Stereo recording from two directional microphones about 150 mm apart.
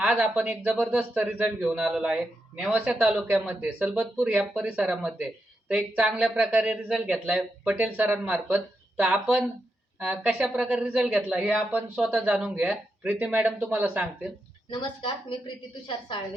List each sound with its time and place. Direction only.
0.2 s speech: 10° right (ahead or behind)
14.7 s a woman's voice: 35° left (ahead or behind)